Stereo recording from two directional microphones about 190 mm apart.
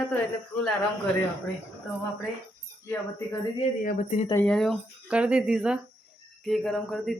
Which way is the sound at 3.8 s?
40° left (ahead or behind).